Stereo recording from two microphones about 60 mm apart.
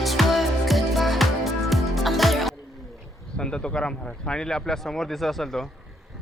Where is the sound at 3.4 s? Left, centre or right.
Centre.